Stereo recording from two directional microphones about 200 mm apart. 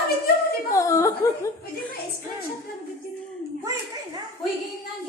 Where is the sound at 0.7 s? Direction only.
15° left (ahead or behind).